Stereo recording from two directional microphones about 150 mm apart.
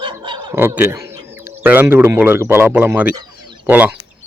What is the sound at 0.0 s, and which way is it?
Snicker, 35° right (ahead or behind).